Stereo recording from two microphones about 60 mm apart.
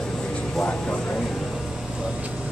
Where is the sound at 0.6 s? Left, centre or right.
Centre.